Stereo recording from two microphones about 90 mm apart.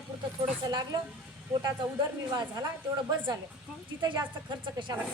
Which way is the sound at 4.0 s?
55° right (ahead or behind).